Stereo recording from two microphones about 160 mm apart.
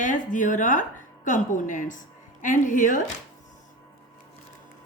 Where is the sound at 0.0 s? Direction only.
55° left (ahead or behind).